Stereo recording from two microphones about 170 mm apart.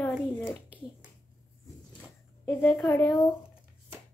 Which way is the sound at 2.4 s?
10° left (ahead or behind).